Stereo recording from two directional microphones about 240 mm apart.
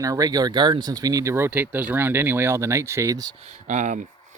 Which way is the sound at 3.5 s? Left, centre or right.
Right.